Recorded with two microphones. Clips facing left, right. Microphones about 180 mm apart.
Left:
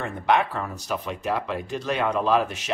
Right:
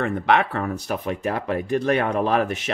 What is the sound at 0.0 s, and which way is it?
Speech, 65° right (ahead or behind).